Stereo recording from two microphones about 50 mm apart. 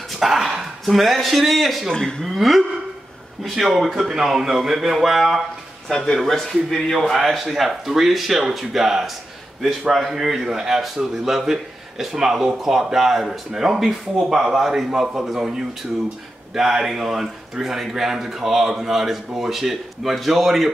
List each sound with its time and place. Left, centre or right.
0.1 s speech: centre
1.9 s speech: centre
2.2 s speech: centre
5.9 s a man's voice: centre